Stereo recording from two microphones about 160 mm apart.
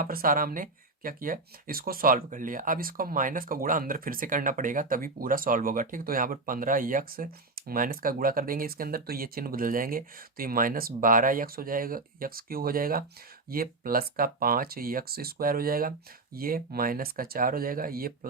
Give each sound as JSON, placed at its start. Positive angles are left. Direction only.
{"t": 0.0, "sound": "speech", "side_deg": -60}